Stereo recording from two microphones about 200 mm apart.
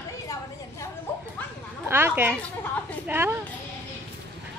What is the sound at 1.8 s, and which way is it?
A woman's voice, 10° right (ahead or behind).